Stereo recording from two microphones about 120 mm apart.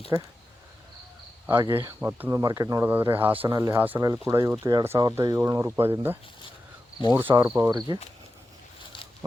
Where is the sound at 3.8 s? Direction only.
15° right (ahead or behind).